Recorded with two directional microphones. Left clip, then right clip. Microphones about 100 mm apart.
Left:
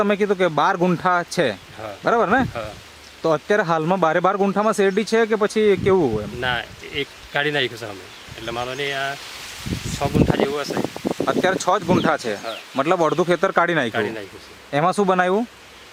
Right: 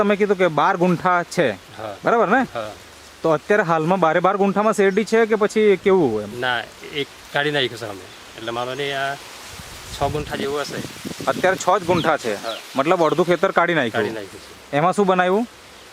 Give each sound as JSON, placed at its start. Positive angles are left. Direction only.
{"t": 0.0, "sound": "speech", "side_deg": 15}
{"t": 2.5, "sound": "speech", "side_deg": -5}
{"t": 3.2, "sound": "speech", "side_deg": 10}
{"t": 6.4, "sound": "speech", "side_deg": -5}
{"t": 11.3, "sound": "speech", "side_deg": 15}
{"t": 13.9, "sound": "speech", "side_deg": 0}
{"t": 14.7, "sound": "speech", "side_deg": 20}